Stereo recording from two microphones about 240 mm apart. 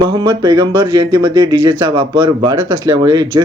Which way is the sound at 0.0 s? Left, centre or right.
Centre.